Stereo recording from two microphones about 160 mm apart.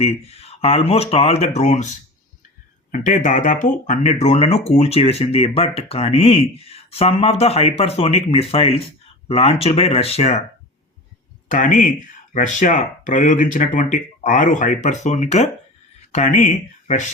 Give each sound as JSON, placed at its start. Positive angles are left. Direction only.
{"t": 0.0, "sound": "speech", "side_deg": 40}
{"t": 2.9, "sound": "speech", "side_deg": 55}
{"t": 11.4, "sound": "speech", "side_deg": 55}